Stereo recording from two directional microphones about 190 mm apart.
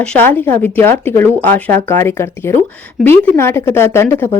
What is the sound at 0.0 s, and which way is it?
Speech, 5° left (ahead or behind).